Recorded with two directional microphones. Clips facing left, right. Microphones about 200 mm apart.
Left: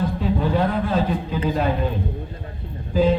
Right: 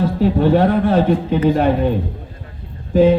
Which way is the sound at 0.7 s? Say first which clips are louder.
Right 7 dB; 55° right (ahead or behind).